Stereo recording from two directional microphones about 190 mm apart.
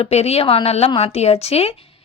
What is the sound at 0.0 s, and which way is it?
A woman's voice, 35° left (ahead or behind).